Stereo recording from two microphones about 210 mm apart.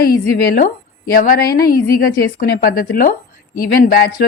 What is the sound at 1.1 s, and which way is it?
A woman's voice, 45° left (ahead or behind).